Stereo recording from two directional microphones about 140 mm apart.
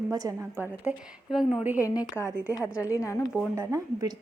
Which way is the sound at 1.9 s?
25° left (ahead or behind).